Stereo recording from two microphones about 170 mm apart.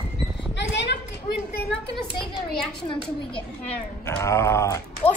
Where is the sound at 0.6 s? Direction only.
90° left.